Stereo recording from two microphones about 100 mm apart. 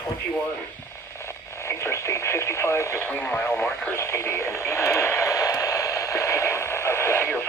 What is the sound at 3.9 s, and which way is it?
Radio, 25° left (ahead or behind).